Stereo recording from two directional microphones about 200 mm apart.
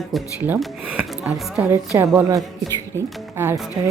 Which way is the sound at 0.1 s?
5° right (ahead or behind).